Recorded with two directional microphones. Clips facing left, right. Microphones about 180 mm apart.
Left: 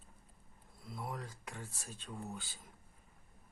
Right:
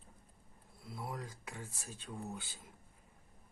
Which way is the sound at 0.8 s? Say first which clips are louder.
Even; 5° right (ahead or behind).